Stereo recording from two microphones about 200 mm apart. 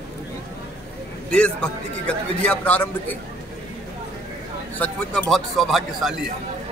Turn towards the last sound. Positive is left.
turn(degrees=0)  # may be behind; listen again after turning